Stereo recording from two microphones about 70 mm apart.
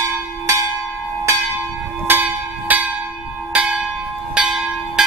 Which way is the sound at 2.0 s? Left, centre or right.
Right.